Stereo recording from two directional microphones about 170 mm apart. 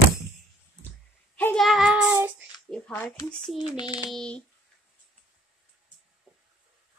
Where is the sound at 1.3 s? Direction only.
10° left (ahead or behind).